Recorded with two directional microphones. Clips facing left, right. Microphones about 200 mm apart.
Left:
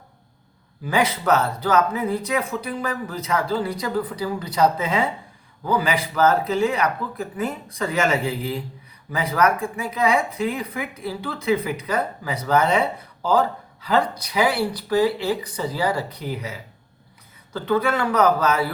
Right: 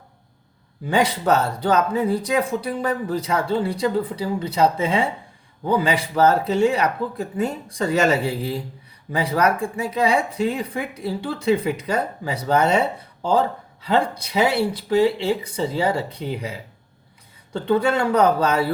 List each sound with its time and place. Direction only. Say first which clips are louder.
0.9 s speech: right 1 dB; 30° right (ahead or behind)
13.8 s speech: right 1 dB; 25° right (ahead or behind)